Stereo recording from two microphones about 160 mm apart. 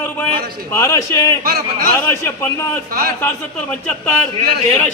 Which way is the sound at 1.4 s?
70° right (ahead or behind).